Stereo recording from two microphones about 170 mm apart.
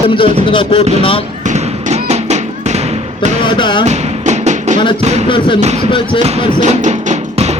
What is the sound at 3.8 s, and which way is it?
Music, 45° right (ahead or behind).